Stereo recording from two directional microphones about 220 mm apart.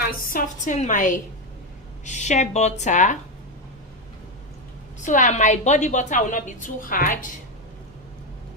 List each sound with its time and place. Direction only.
0.3 s a woman's voice: 35° left (ahead or behind)
5.0 s a woman's voice: 35° left (ahead or behind)